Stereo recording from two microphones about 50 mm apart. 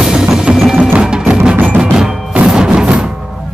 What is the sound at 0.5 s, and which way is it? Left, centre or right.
Tubular bells, centre.